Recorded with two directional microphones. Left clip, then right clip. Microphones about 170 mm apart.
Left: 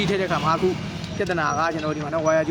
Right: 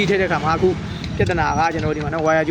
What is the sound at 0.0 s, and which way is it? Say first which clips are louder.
Speech: right 4 dB; 5° right (ahead or behind).